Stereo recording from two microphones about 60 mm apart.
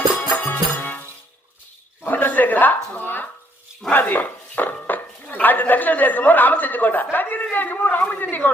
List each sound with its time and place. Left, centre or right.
0.1 s music: left
2.0 s a sound: left
3.9 s a man's voice: left